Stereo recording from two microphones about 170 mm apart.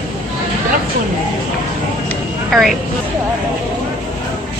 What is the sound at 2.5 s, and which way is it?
Speech, centre (ahead or behind).